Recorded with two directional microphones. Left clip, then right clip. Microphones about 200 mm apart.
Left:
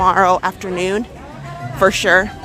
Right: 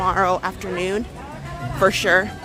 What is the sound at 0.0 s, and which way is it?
Speech, 20° left (ahead or behind).